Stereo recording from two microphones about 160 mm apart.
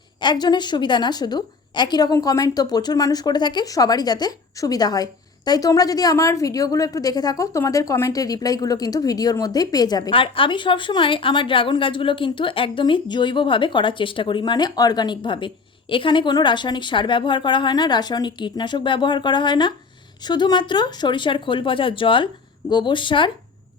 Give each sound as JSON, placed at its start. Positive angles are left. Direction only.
{"t": 0.2, "sound": "a woman's voice", "side_deg": 30}